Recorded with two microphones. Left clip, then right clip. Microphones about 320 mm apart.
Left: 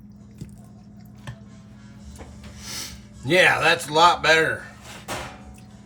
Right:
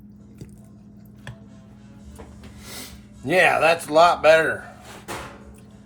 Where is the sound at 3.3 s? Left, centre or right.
Centre.